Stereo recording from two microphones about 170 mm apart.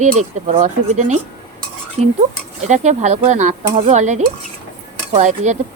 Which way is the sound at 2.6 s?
45° right (ahead or behind).